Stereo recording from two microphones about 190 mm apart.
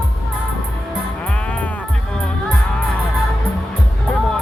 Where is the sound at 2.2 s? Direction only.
5° left (ahead or behind).